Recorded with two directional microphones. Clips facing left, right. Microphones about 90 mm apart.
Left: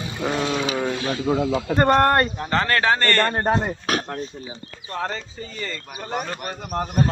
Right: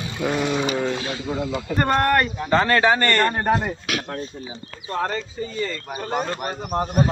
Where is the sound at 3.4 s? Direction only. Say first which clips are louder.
Even; 30° left (ahead or behind).